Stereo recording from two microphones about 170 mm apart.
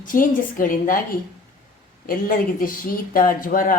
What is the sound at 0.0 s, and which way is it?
A woman's voice, 50° left (ahead or behind).